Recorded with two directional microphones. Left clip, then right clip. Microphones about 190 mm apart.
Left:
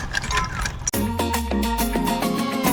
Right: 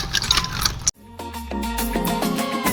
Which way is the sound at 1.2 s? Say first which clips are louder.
Left 6 dB; centre (ahead or behind).